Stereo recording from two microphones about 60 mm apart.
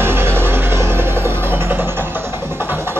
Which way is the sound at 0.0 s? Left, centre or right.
Right.